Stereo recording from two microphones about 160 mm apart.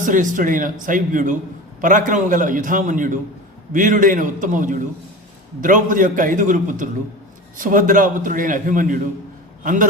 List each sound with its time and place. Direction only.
0.0 s a man's voice: 55° right (ahead or behind)